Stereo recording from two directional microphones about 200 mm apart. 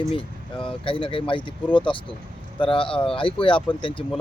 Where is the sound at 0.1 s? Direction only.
25° left (ahead or behind).